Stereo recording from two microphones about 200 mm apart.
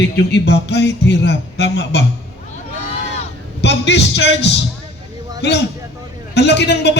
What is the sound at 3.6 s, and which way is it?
Speech, 60° left (ahead or behind).